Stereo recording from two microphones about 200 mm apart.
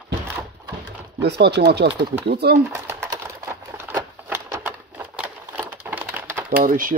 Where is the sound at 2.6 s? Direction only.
10° right (ahead or behind).